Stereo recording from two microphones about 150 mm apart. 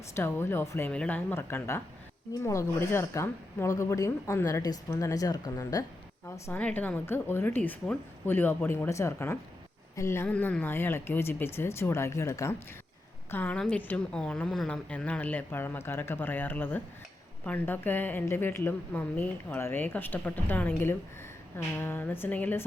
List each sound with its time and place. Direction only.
0.2 s a woman's voice: 15° left (ahead or behind)